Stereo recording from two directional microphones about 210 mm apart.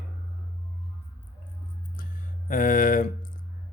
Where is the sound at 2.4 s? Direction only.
40° left (ahead or behind).